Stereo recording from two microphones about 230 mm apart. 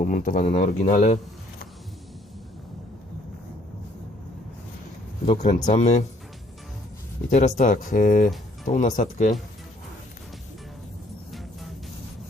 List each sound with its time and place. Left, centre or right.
0.0 s speech: left
5.2 s speech: left
7.3 s speech: left